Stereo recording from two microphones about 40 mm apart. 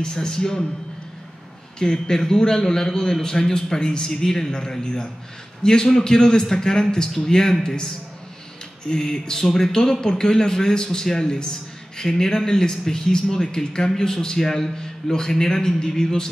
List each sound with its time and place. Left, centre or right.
0.0 s a man's voice: centre
1.8 s a man's voice: centre